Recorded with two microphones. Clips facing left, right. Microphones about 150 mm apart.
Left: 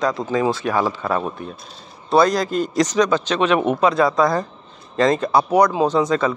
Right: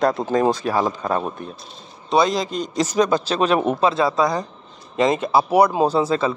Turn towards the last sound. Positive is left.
turn(degrees=-30)  # may be behind; listen again after turning